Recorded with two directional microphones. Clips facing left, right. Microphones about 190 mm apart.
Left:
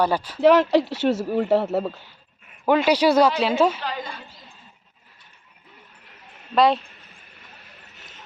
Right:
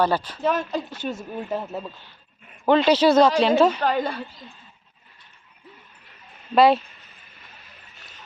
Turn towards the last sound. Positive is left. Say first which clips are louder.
# right 2 dB
turn(degrees=-5)  # may be behind; listen again after turning